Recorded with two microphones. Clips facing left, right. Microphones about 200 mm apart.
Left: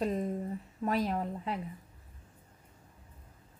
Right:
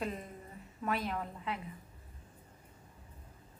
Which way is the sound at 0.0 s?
35° left (ahead or behind).